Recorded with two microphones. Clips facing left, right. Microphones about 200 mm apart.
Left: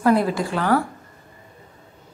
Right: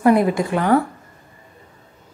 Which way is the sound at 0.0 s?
15° right (ahead or behind).